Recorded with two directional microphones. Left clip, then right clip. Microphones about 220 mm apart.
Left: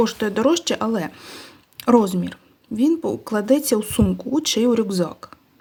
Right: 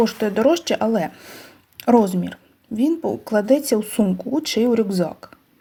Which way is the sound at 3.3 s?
20° left (ahead or behind).